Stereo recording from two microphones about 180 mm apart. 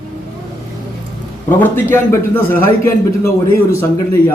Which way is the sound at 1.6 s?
15° left (ahead or behind).